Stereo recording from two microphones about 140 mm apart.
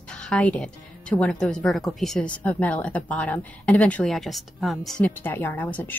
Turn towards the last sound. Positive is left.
turn(degrees=15)  # may be behind; listen again after turning